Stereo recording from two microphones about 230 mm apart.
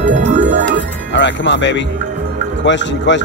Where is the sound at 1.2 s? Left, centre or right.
Left.